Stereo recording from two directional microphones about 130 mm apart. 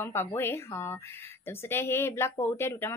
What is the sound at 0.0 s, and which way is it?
A woman's voice, 20° left (ahead or behind).